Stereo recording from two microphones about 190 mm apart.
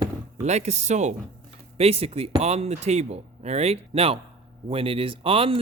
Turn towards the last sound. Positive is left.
turn(degrees=-30)  # may be behind; listen again after turning